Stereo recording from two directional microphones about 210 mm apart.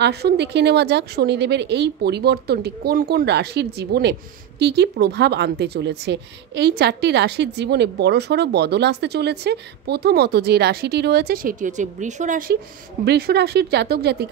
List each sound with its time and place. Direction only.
0.0 s a woman's voice: 50° right (ahead or behind)
13.0 s a woman's voice: 50° right (ahead or behind)